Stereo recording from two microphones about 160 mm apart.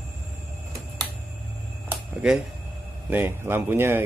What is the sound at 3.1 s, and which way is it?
Speech, 15° right (ahead or behind).